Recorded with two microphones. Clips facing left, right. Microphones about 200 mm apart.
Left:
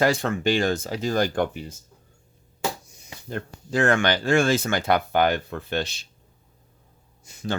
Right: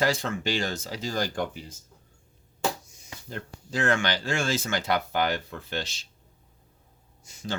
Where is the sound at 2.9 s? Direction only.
60° left (ahead or behind).